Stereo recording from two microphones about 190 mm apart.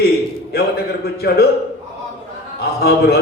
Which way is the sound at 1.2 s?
55° left (ahead or behind).